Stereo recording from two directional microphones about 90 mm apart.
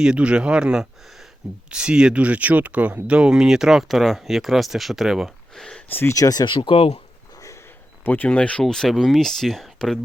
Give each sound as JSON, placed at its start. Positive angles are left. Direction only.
{"t": 0.0, "sound": "speech", "side_deg": -10}
{"t": 5.9, "sound": "speech", "side_deg": 25}
{"t": 6.1, "sound": "speech", "side_deg": 40}
{"t": 6.4, "sound": "speech", "side_deg": 70}
{"t": 7.3, "sound": "a sound", "side_deg": 35}
{"t": 8.0, "sound": "speech", "side_deg": 20}
{"t": 8.6, "sound": "speech", "side_deg": 5}